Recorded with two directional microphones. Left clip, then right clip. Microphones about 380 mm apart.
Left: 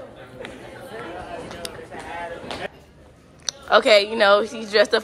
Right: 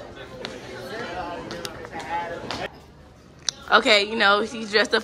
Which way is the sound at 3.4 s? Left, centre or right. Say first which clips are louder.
Left 2 dB; centre.